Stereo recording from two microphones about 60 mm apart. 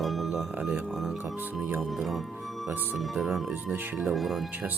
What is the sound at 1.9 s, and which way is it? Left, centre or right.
Speech, centre.